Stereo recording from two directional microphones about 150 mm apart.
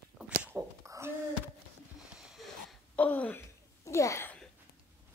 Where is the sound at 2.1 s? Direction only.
Centre (ahead or behind).